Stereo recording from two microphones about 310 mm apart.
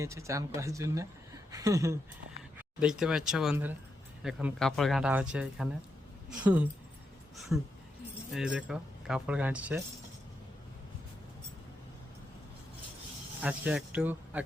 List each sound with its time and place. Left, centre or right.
0.0 s speech: centre
13.4 s speech: centre